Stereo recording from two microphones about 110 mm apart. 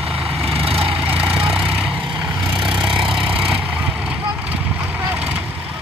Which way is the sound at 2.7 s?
5° right (ahead or behind).